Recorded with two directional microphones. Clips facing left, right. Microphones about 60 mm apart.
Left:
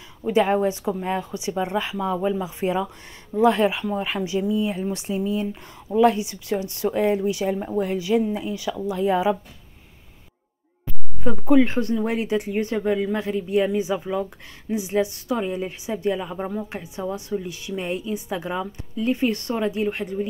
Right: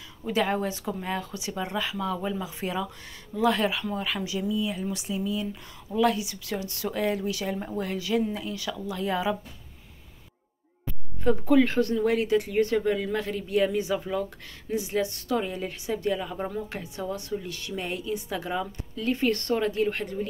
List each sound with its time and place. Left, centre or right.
0.3 s speech: left
11.2 s a woman's voice: centre